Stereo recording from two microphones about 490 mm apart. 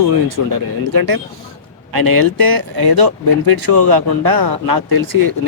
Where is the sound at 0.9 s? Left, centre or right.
Right.